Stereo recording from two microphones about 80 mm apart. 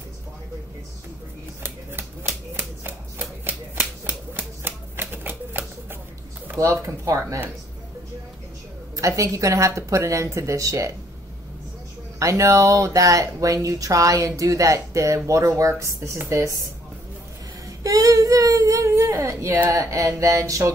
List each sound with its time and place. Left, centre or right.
1.6 s shuffling cards: right
7.1 s a woman's voice: right
8.9 s a woman's voice: right
12.2 s a woman's voice: right
17.6 s a woman's voice: right